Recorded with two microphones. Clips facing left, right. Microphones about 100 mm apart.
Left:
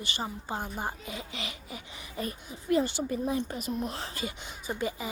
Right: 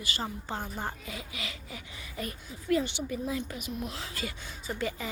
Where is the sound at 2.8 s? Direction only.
40° left (ahead or behind).